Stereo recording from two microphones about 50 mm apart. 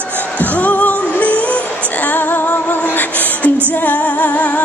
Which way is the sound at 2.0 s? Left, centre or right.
Left.